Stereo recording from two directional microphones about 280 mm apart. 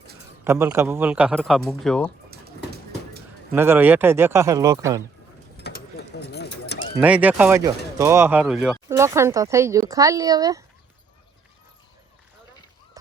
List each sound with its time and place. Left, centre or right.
0.4 s speech: centre
3.5 s speech: centre
5.5 s a sound: left
7.0 s speech: centre